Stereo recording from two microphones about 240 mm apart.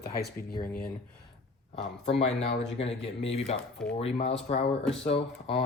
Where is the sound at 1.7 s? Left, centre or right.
Left.